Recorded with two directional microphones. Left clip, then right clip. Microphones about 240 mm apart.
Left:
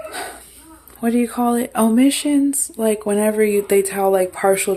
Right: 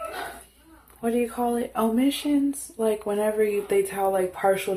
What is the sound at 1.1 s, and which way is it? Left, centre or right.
Speech, left.